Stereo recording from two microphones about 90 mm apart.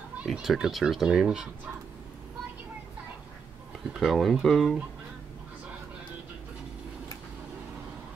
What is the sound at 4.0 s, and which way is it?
Speech, centre (ahead or behind).